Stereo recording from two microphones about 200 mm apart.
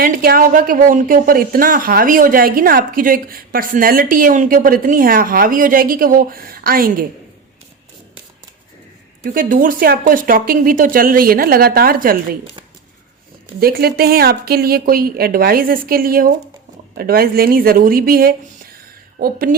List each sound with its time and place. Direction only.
0.0 s speech: 45° right (ahead or behind)
9.2 s speech: 45° right (ahead or behind)
13.6 s speech: 50° right (ahead or behind)